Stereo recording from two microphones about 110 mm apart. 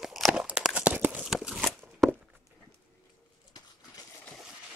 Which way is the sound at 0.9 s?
15° right (ahead or behind).